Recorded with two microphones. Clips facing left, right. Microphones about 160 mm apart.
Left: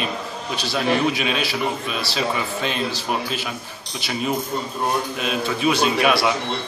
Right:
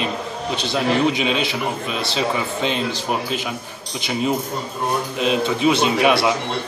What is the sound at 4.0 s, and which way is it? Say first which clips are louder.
A man's voice: right 3 dB; 20° right (ahead or behind).